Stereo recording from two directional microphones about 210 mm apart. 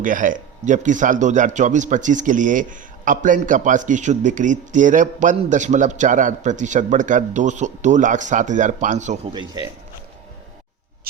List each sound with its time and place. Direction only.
0.0 s a man's voice: 40° right (ahead or behind)
9.3 s speech: 20° right (ahead or behind)